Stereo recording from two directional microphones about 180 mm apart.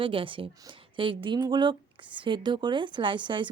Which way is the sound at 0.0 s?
30° right (ahead or behind).